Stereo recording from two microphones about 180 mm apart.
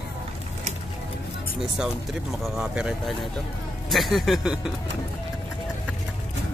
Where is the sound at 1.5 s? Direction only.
5° right (ahead or behind).